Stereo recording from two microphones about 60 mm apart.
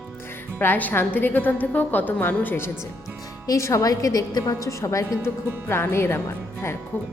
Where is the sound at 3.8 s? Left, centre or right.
Left.